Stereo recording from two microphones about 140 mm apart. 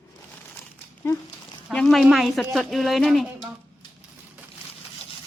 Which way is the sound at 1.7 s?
Centre (ahead or behind).